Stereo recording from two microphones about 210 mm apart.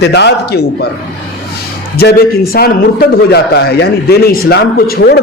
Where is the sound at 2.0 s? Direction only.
45° left (ahead or behind).